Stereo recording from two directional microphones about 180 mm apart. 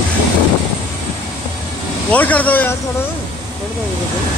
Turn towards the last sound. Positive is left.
turn(degrees=10)  # may be behind; listen again after turning